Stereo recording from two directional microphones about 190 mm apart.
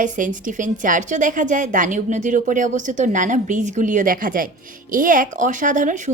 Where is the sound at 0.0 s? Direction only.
40° right (ahead or behind).